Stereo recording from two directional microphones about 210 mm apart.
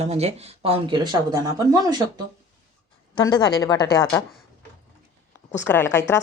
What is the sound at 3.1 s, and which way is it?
A woman's voice, 20° left (ahead or behind).